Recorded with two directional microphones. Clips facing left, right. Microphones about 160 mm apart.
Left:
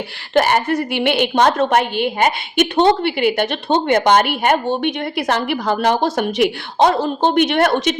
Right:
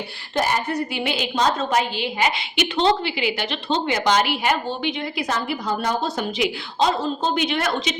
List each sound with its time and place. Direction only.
0.3 s a woman's voice: 75° left (ahead or behind)